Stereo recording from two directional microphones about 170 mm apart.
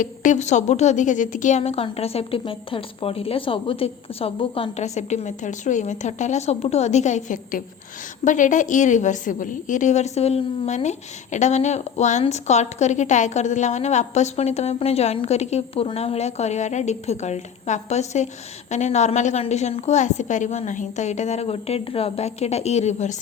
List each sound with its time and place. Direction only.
0.0 s a woman's voice: 50° left (ahead or behind)